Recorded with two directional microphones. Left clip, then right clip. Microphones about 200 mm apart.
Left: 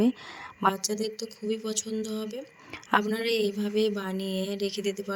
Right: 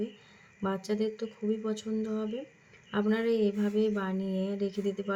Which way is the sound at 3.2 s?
60° left (ahead or behind).